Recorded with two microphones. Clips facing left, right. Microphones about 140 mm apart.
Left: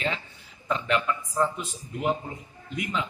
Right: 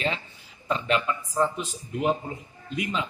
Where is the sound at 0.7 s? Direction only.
20° right (ahead or behind).